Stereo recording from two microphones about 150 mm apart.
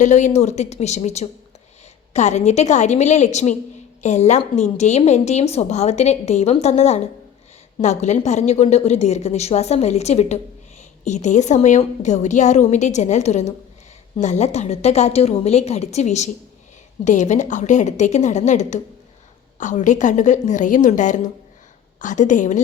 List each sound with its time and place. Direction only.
0.0 s a woman's voice: 50° left (ahead or behind)